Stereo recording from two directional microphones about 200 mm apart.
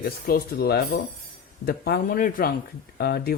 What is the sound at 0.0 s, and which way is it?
Speech, 45° left (ahead or behind).